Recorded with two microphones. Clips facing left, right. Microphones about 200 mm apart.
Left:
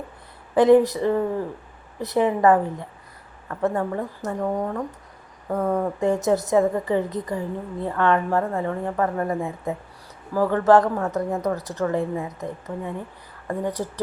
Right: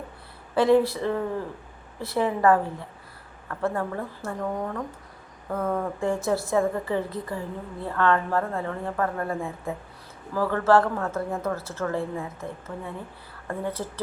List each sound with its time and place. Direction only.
0.5 s a woman's voice: 15° left (ahead or behind)